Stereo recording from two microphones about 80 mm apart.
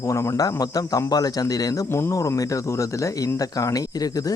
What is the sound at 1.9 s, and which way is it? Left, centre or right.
Speech, left.